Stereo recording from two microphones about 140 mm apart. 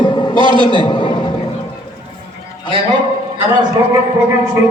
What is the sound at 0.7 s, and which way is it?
Speech, 35° left (ahead or behind).